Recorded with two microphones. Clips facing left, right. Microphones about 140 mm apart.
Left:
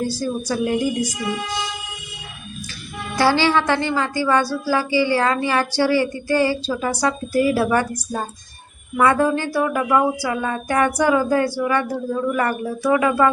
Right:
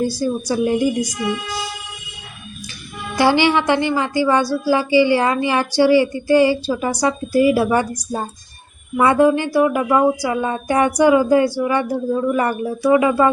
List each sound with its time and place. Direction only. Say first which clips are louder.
0.0 s a woman's voice: right 3 dB; 15° right (ahead or behind)
3.2 s a woman's voice: right 2 dB; 15° right (ahead or behind)